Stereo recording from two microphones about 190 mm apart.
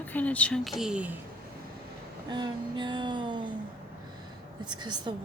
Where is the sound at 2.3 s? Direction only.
25° right (ahead or behind).